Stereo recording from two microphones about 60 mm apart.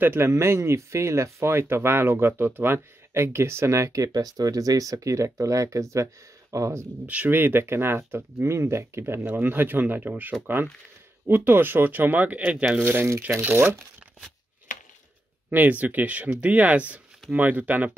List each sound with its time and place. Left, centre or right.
0.0 s speech: right
0.3 s speech: right
7.2 s speech: right
9.2 s speech: right
12.7 s speech: right
13.4 s speech: right
15.5 s speech: right